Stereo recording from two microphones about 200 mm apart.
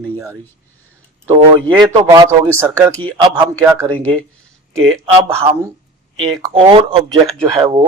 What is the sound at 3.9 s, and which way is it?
Speech, 10° left (ahead or behind).